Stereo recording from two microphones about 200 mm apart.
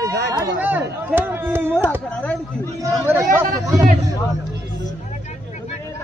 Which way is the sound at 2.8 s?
15° right (ahead or behind).